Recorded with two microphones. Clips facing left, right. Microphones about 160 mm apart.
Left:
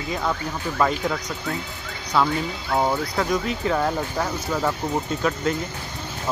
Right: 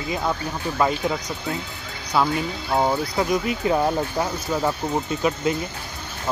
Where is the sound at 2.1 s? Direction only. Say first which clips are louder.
Even; 15° right (ahead or behind).